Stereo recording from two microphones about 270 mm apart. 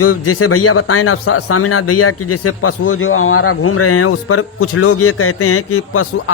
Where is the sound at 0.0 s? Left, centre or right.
Left.